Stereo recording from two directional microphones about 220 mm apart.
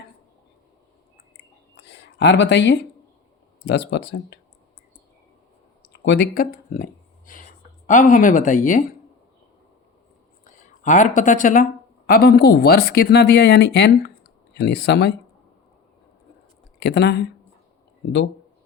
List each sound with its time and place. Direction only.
1.7 s a sound: 50° left (ahead or behind)
3.7 s speech: 50° left (ahead or behind)
5.9 s speech: 50° left (ahead or behind)
7.9 s speech: 35° left (ahead or behind)
10.4 s speech: 35° left (ahead or behind)
16.8 s speech: 50° left (ahead or behind)